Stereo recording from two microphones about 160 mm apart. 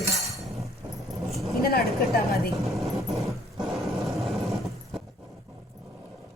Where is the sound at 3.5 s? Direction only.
Centre (ahead or behind).